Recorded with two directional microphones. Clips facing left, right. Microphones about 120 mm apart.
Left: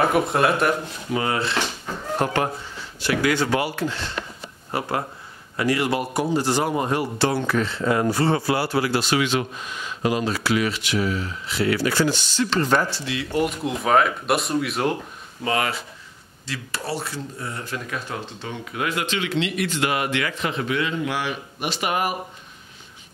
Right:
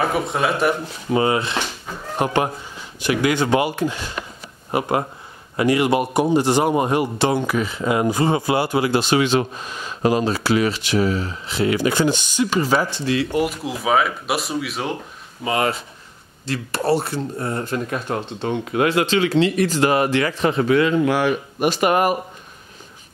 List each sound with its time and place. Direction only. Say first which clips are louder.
0.0 s speech: left 1 dB; centre (ahead or behind)
1.1 s speech: right 4 dB; 20° right (ahead or behind); by 15.0 s centre (ahead or behind)
15.4 s speech: right 3 dB; 25° right (ahead or behind)
16.4 s speech: right 9 dB; 55° right (ahead or behind)
18.4 s speech: right 11 dB; 55° right (ahead or behind)
18.9 s speech: right 6 dB; 30° right (ahead or behind); by 22.1 s 45° right (ahead or behind)